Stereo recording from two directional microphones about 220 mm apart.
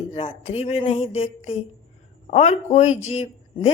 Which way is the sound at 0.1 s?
25° left (ahead or behind).